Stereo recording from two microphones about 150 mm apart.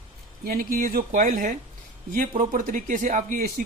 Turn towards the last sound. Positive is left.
turn(degrees=-65)  # may be behind; listen again after turning